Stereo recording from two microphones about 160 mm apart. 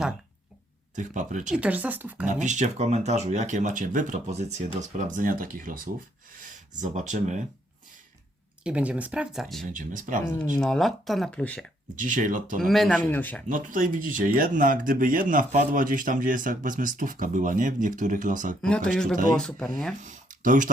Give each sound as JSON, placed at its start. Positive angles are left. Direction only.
{"t": 0.9, "sound": "speech", "side_deg": -50}
{"t": 1.5, "sound": "speech", "side_deg": -10}
{"t": 2.2, "sound": "speech", "side_deg": -50}
{"t": 8.6, "sound": "speech", "side_deg": -10}
{"t": 9.7, "sound": "speech", "side_deg": -55}
{"t": 10.6, "sound": "speech", "side_deg": 0}
{"t": 11.9, "sound": "speech", "side_deg": -55}
{"t": 12.5, "sound": "speech", "side_deg": 0}
{"t": 13.5, "sound": "speech", "side_deg": -60}
{"t": 18.6, "sound": "speech", "side_deg": 5}
{"t": 20.0, "sound": "a sound", "side_deg": -50}